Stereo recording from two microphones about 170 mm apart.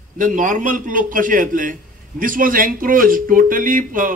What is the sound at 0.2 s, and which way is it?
A man's voice, 50° right (ahead or behind).